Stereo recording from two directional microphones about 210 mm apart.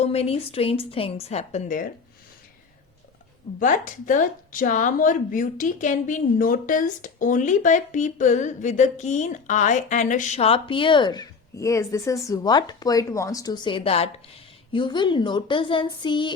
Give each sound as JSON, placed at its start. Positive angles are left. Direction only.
{"t": 0.0, "sound": "a woman's voice", "side_deg": 30}
{"t": 3.6, "sound": "a woman's voice", "side_deg": 40}